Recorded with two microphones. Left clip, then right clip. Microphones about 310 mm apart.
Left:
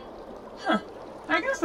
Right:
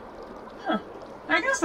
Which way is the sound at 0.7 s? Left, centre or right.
Centre.